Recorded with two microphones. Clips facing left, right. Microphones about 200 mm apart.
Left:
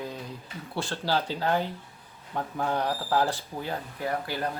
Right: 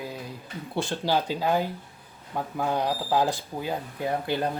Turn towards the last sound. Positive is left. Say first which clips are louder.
# right 3 dB
turn(degrees=-20)  # may be behind; listen again after turning